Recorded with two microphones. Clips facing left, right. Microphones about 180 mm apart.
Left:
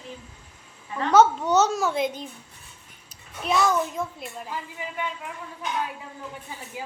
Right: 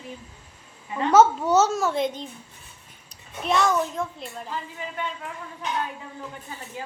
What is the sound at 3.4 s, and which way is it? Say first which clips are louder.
A woman's voice: even; centre (ahead or behind).